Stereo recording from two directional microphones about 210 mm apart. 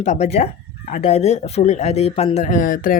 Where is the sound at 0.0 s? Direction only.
30° left (ahead or behind).